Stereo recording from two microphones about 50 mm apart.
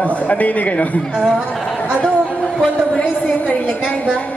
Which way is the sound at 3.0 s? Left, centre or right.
Left.